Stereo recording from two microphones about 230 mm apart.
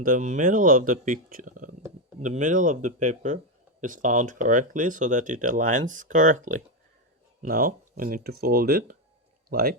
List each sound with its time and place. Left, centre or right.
0.0 s speech: right